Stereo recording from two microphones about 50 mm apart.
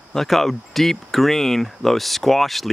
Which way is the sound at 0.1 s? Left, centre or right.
Centre.